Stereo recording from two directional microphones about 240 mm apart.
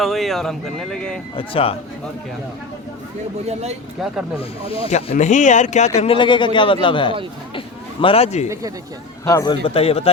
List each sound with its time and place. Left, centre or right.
0.0 s speech: centre
1.4 s speech: left
3.4 s speech: right
4.7 s speech: left
9.2 s a man's voice: centre
9.6 s speech: left